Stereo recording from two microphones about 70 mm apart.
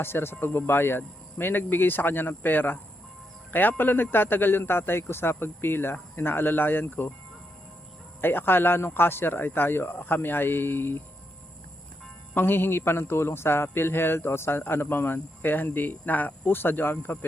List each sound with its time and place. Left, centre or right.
0.0 s a man's voice: left
8.2 s a man's voice: left
12.3 s a man's voice: left